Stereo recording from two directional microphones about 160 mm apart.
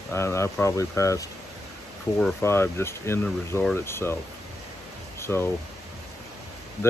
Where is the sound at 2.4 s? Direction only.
15° left (ahead or behind).